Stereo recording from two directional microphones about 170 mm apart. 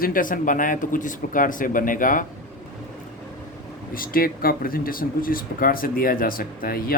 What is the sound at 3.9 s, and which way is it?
Speech, 60° left (ahead or behind).